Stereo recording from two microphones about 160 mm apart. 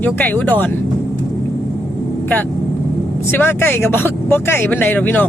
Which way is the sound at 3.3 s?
15° left (ahead or behind).